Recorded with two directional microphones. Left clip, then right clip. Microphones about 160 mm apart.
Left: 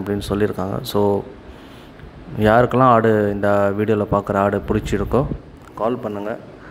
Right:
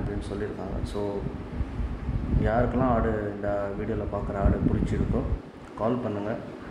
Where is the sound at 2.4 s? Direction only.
45° left (ahead or behind).